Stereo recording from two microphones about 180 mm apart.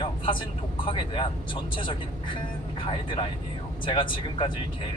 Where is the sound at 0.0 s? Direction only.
25° left (ahead or behind).